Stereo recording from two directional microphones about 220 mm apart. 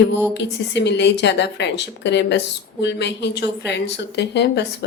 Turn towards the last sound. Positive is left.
turn(degrees=50)  # may be behind; listen again after turning